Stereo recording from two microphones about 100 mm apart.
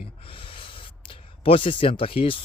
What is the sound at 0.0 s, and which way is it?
A man's voice, 65° left (ahead or behind).